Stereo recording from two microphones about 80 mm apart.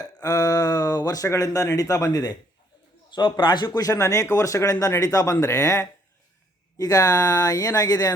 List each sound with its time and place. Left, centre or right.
0.0 s a sound: left
1.3 s speech: left
2.0 s a man's voice: left
3.1 s a man's voice: left
3.7 s speech: left